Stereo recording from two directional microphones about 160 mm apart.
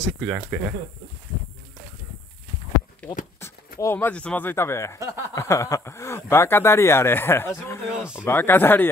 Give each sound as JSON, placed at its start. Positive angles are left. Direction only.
{"t": 0.0, "sound": "speech", "side_deg": 0}
{"t": 3.0, "sound": "speech", "side_deg": 10}
{"t": 7.9, "sound": "speech", "side_deg": -5}
{"t": 8.3, "sound": "speech", "side_deg": 15}